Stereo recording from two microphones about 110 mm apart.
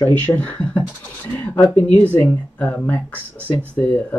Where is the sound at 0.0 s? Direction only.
20° left (ahead or behind).